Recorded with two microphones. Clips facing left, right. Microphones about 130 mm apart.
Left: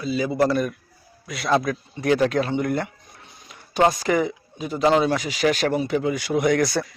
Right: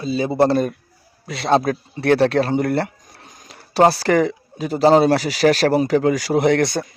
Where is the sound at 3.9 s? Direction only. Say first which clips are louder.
Right 5 dB; 80° right.